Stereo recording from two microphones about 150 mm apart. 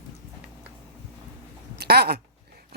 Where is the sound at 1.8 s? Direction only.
90° right.